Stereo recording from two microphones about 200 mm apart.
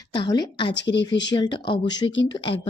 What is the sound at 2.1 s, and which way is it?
Speech, 65° left (ahead or behind).